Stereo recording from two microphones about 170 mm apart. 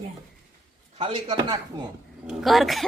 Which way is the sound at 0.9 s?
30° right (ahead or behind).